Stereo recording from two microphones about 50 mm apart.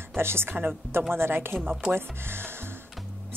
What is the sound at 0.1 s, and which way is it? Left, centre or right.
A woman's voice, right.